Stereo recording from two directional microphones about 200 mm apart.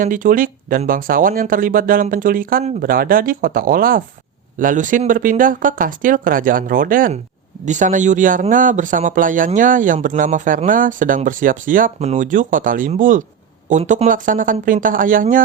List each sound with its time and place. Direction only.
0.0 s speech: 40° right (ahead or behind)